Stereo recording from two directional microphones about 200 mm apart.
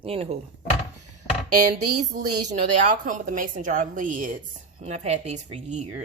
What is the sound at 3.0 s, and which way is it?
A woman's voice, 40° right (ahead or behind).